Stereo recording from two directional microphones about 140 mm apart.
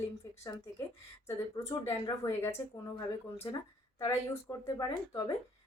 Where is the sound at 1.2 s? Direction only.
20° left (ahead or behind).